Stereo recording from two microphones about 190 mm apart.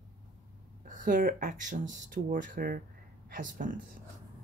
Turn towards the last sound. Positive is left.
turn(degrees=-45)  # may be behind; listen again after turning